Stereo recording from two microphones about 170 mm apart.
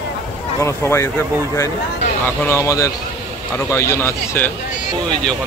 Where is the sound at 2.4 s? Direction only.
15° left (ahead or behind).